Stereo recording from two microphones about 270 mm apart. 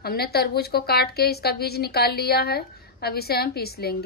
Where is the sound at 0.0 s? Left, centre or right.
Left.